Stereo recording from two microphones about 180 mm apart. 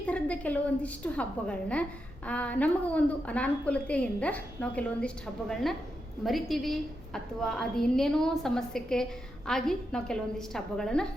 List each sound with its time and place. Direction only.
0.0 s a woman's voice: 5° left (ahead or behind)